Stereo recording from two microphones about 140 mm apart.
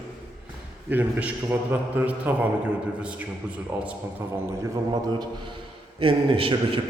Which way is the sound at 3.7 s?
15° right (ahead or behind).